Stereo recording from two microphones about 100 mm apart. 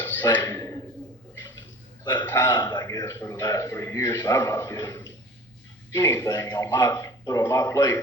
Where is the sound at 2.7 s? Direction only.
40° left (ahead or behind).